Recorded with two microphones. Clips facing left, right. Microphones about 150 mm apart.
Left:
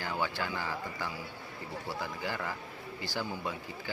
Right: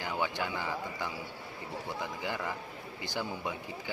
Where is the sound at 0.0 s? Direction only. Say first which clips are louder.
Right 1 dB; 15° right (ahead or behind).